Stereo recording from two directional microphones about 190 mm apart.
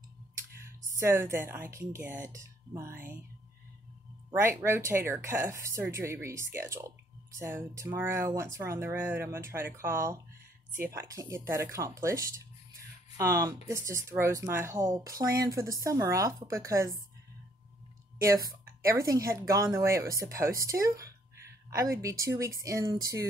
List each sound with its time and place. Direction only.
0.6 s speech: 15° right (ahead or behind)
4.3 s speech: 10° right (ahead or behind)
18.2 s speech: 15° right (ahead or behind)